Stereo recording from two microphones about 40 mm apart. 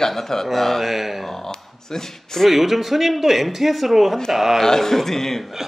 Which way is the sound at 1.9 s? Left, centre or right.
Centre.